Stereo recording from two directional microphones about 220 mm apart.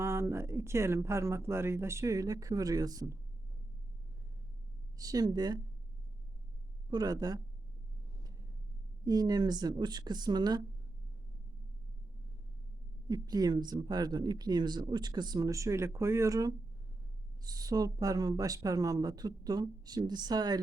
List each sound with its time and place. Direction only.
0.0 s speech: 10° right (ahead or behind)
4.9 s speech: 15° right (ahead or behind)
6.9 s speech: 15° right (ahead or behind)
8.2 s rumble: 15° right (ahead or behind)
9.0 s speech: 15° right (ahead or behind)
13.1 s speech: 15° right (ahead or behind)